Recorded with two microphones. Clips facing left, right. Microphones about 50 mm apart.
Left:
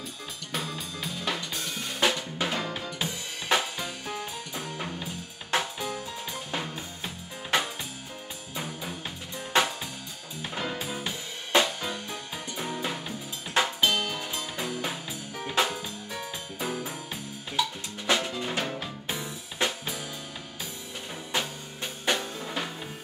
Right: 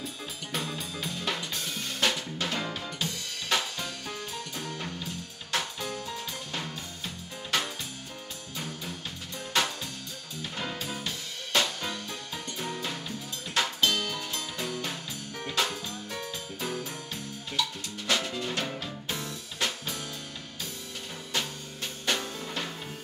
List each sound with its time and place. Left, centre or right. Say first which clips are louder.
0.5 s drum kit: even; centre
7.5 s music: left 3 dB; centre
22.0 s music: left 2 dB; centre